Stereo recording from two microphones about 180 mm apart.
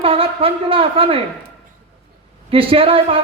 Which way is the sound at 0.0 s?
30° right (ahead or behind).